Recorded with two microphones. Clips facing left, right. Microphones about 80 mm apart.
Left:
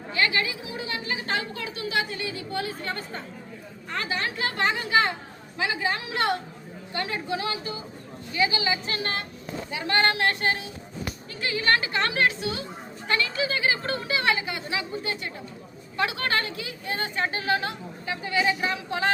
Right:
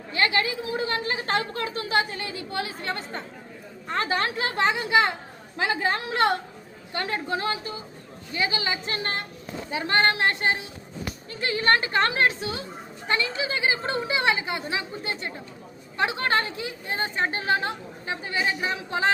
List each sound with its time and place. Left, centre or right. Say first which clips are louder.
0.1 s a woman's voice: right 1 dB; right
3.8 s a woman's voice: right 4 dB; right